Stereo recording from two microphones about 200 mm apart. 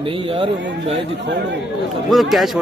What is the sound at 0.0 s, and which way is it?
Speech, 25° right (ahead or behind).